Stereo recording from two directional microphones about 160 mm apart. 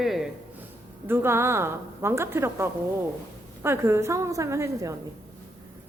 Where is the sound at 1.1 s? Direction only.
15° right (ahead or behind).